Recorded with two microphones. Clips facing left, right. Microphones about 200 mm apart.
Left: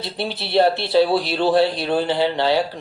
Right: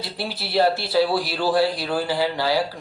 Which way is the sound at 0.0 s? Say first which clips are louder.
Left 3 dB; 25° left (ahead or behind).